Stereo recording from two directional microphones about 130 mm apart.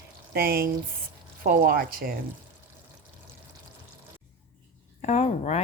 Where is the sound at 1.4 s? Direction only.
90° right.